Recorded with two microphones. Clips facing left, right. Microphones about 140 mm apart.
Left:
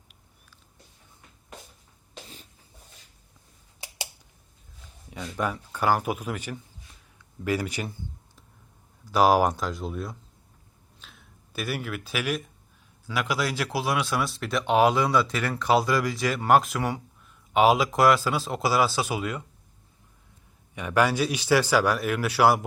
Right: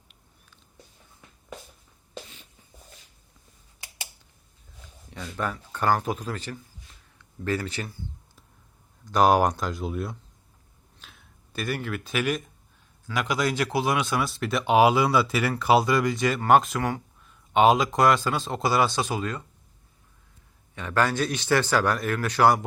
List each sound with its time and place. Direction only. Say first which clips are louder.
5.1 s speech: left 2 dB; 10° left (ahead or behind)
9.0 s speech: even; 5° left (ahead or behind)
11.0 s a sound: even; centre (ahead or behind)
13.1 s speech: right 2 dB; 5° left (ahead or behind)
20.7 s speech: left 1 dB; 10° left (ahead or behind)